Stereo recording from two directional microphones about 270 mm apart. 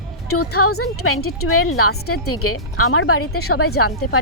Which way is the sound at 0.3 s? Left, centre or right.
Left.